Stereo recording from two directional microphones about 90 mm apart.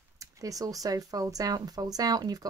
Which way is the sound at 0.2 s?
40° right (ahead or behind).